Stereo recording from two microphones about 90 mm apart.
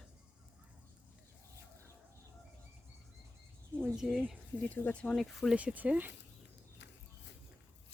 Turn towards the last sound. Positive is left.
turn(degrees=-20)  # may be behind; listen again after turning